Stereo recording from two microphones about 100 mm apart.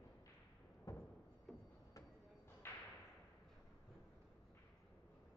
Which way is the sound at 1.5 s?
Centre (ahead or behind).